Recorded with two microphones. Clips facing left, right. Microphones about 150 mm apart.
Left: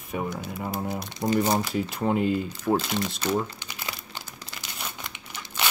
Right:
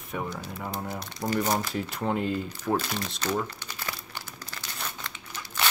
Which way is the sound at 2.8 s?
20° left (ahead or behind).